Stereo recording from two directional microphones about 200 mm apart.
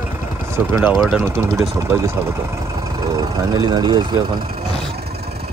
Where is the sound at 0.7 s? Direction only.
10° right (ahead or behind).